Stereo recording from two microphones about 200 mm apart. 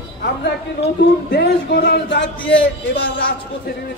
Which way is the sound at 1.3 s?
55° left (ahead or behind).